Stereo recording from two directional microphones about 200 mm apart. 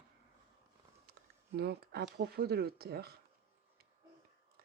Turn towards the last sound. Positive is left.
turn(degrees=-50)  # may be behind; listen again after turning